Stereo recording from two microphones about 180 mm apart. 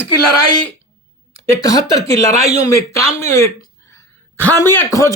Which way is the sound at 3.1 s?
15° left (ahead or behind).